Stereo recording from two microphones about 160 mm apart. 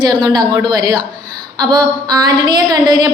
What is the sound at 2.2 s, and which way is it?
Speech, 25° right (ahead or behind).